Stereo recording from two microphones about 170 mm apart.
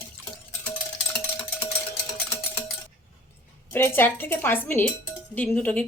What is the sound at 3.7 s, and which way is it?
A woman's voice, 15° left (ahead or behind).